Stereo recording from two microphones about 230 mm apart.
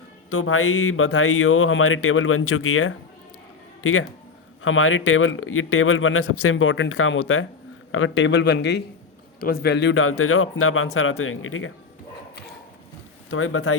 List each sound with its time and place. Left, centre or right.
0.3 s speech: left
4.6 s a man's voice: left
13.3 s speech: left